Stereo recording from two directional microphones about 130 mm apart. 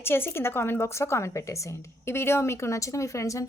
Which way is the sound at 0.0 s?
15° left (ahead or behind).